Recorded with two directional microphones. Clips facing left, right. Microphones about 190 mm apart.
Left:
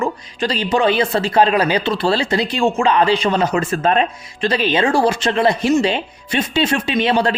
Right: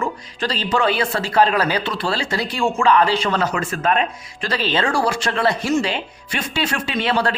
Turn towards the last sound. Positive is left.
turn(degrees=20)  # may be behind; listen again after turning